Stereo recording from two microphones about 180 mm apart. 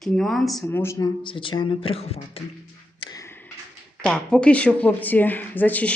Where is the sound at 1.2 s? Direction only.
30° left (ahead or behind).